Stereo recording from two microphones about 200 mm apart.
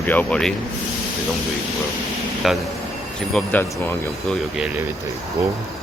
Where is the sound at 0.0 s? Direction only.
10° left (ahead or behind).